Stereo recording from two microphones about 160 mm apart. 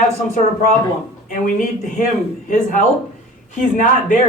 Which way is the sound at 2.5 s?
50° left (ahead or behind).